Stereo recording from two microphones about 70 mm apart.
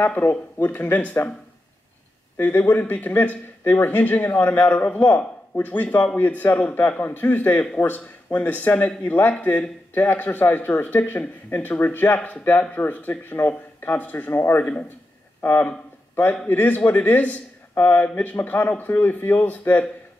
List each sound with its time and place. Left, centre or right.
0.0 s speech: left
2.3 s a man's voice: left
14.6 s a man's voice: centre
16.4 s speech: left
17.7 s speech: left
18.0 s speech: left